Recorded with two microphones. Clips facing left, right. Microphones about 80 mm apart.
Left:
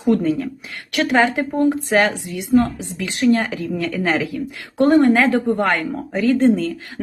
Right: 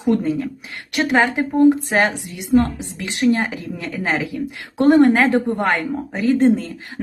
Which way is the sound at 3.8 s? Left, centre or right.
Right.